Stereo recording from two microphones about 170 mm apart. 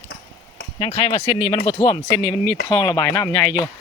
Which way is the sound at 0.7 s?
30° left (ahead or behind).